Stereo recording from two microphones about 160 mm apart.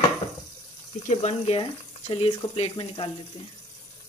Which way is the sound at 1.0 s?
45° left (ahead or behind).